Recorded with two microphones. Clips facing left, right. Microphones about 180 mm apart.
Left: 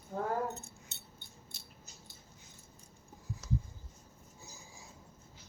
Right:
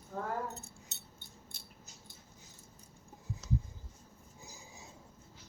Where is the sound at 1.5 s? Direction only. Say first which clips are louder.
Even; 55° right (ahead or behind).